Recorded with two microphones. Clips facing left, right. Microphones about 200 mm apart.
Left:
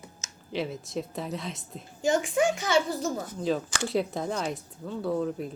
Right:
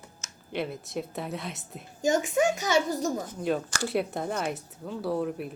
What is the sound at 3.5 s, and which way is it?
Speech, centre (ahead or behind).